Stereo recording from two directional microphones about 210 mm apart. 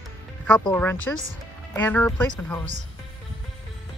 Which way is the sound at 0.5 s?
5° left (ahead or behind).